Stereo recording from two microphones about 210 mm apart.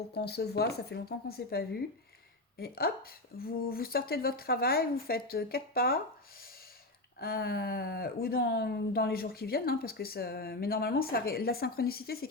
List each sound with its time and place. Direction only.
0.1 s speech: 50° left (ahead or behind)
7.2 s speech: 45° left (ahead or behind)